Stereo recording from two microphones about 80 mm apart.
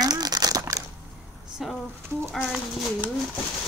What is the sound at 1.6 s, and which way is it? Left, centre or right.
Speech, centre.